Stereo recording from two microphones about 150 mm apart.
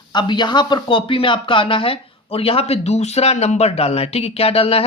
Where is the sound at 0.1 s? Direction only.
30° left (ahead or behind).